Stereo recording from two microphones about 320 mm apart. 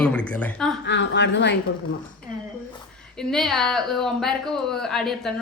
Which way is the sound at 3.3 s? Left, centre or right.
Centre.